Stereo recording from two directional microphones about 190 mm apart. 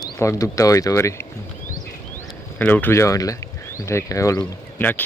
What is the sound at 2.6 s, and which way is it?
Speech, 10° left (ahead or behind).